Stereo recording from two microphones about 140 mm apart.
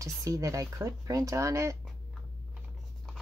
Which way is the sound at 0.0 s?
25° right (ahead or behind).